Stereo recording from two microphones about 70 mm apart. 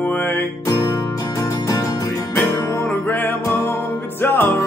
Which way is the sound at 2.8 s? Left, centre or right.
Left.